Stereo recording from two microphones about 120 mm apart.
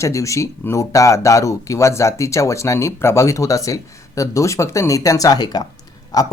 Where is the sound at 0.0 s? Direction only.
25° left (ahead or behind).